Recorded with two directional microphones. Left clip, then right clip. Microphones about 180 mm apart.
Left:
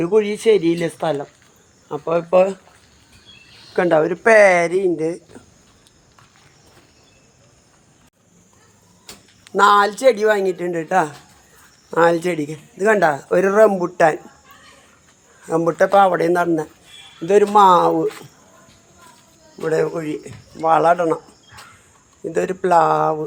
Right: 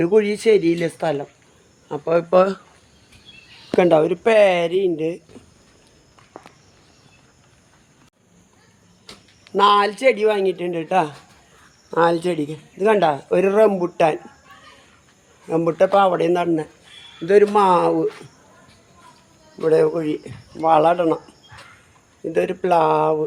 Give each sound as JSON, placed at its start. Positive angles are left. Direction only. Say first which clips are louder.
{"t": 0.0, "sound": "speech", "louder": "even", "side_deg": -25}
{"t": 1.9, "sound": "speech", "louder": "even", "side_deg": -25}
{"t": 4.2, "sound": "a man's voice", "louder": "left 3 dB", "side_deg": 5}
{"t": 9.6, "sound": "a man's voice", "louder": "left 2 dB", "side_deg": 0}
{"t": 15.4, "sound": "a man's voice", "louder": "left 1 dB", "side_deg": -5}
{"t": 19.5, "sound": "speech", "louder": "right 3 dB", "side_deg": -5}
{"t": 22.3, "sound": "a man's voice", "louder": "left 1 dB", "side_deg": 0}